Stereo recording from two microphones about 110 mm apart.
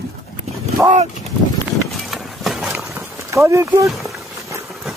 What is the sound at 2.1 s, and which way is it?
Run, centre (ahead or behind).